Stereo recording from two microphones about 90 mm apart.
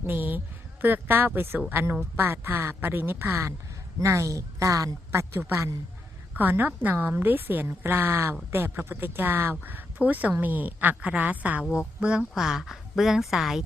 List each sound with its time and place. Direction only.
0.0 s a woman's voice: 20° right (ahead or behind); by 13.6 s 5° right (ahead or behind)